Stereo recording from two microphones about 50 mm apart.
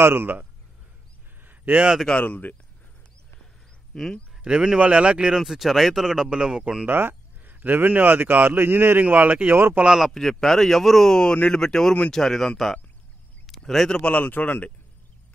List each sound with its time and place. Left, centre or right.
0.0 s speech: right
1.4 s a sound: right
2.2 s speech: left
3.9 s speech: centre
4.4 s speech: centre
5.4 s speech: centre
6.9 s a sound: right
7.6 s speech: right
9.8 s speech: centre
10.1 s speech: centre
13.5 s a sound: centre
13.8 s speech: left
14.2 s speech: left